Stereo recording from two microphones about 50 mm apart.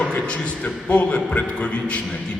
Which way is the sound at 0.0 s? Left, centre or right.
Left.